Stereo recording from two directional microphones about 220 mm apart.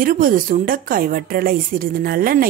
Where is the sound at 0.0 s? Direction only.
40° right (ahead or behind).